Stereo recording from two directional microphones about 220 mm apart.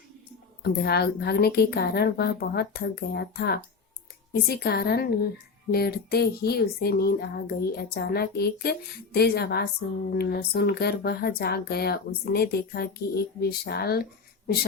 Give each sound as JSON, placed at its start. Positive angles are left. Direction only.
{"t": 0.6, "sound": "speech", "side_deg": 45}